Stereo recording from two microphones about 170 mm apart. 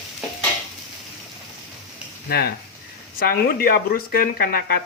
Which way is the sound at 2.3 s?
65° left (ahead or behind).